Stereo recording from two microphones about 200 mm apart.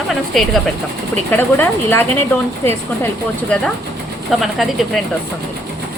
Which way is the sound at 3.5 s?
5° left (ahead or behind).